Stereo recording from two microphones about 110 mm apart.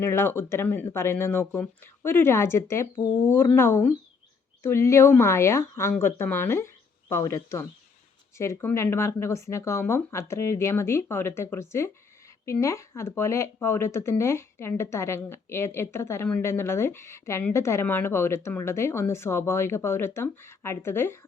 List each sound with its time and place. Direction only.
0.0 s speech: 25° left (ahead or behind)